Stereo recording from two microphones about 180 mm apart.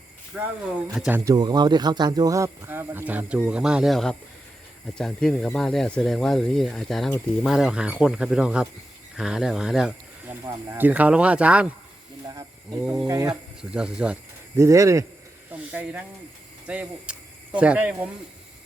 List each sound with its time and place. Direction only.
0.9 s speech: 5° right (ahead or behind)
1.2 s speech: 20° right (ahead or behind)
13.1 s speech: 20° right (ahead or behind)
13.6 s speech: 5° right (ahead or behind)
14.5 s speech: 15° right (ahead or behind)